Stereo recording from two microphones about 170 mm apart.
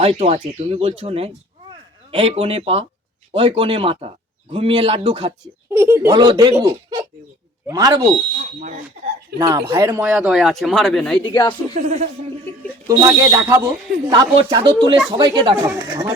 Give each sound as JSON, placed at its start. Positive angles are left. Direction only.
{"t": 0.0, "sound": "speech", "side_deg": -35}
{"t": 5.7, "sound": "speech", "side_deg": -15}
{"t": 9.4, "sound": "speech", "side_deg": -25}
{"t": 9.7, "sound": "speech", "side_deg": -15}
{"t": 10.1, "sound": "speech", "side_deg": -5}
{"t": 11.2, "sound": "speech", "side_deg": 25}
{"t": 11.7, "sound": "speech", "side_deg": -40}
{"t": 12.9, "sound": "speech", "side_deg": -20}